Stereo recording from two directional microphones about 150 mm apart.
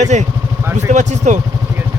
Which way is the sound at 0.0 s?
55° right (ahead or behind).